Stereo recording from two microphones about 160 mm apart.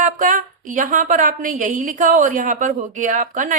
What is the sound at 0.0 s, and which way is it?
A woman's voice, 55° right (ahead or behind).